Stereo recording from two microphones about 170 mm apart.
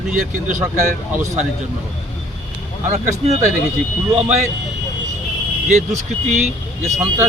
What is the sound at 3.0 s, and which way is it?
Speech, 15° right (ahead or behind).